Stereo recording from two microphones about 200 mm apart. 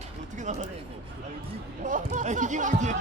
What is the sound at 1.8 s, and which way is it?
Speech, 40° right (ahead or behind).